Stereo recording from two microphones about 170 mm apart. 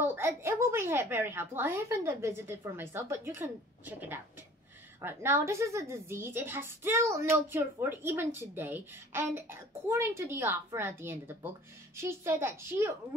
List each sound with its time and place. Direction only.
0.0 s a woman's voice: 15° right (ahead or behind)